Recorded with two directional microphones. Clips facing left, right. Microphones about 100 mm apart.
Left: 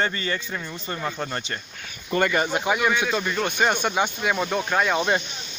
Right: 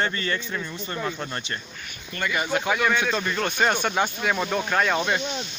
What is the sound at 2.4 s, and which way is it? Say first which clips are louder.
Speech: left 1 dB; 15° left (ahead or behind).